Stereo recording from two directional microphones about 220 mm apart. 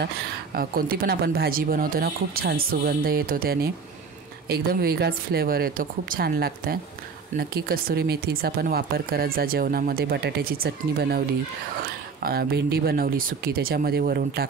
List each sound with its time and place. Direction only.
0.6 s speech: 45° right (ahead or behind)